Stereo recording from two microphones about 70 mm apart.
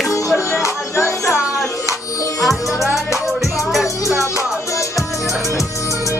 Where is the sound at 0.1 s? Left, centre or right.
Left.